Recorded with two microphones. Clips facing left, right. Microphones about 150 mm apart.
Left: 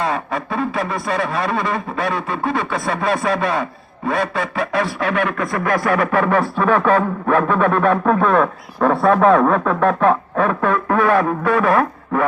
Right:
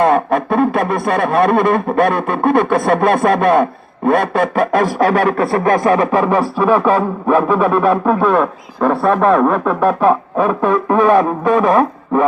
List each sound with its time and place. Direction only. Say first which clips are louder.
0.0 s speech: right 9 dB; 55° right (ahead or behind); by 12.2 s 20° right (ahead or behind)